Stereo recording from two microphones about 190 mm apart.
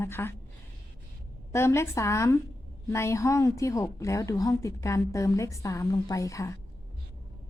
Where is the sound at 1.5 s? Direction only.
15° left (ahead or behind).